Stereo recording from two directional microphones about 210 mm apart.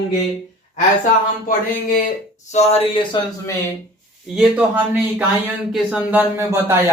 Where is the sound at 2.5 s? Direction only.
25° left (ahead or behind).